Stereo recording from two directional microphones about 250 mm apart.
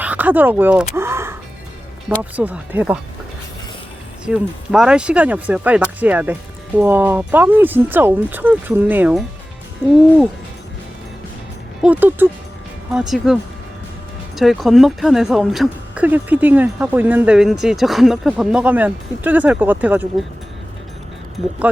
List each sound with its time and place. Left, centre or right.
0.0 s a sound: centre
2.0 s speech: centre
4.3 s speech: centre
11.8 s speech: centre